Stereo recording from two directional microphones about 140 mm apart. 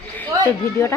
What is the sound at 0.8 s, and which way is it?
Speech, 20° left (ahead or behind).